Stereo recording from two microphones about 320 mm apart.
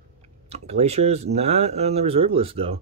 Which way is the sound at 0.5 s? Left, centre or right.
Centre.